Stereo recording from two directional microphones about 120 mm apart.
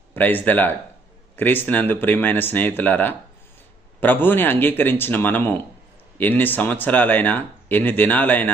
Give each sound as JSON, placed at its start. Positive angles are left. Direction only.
{"t": 0.1, "sound": "speech", "side_deg": 15}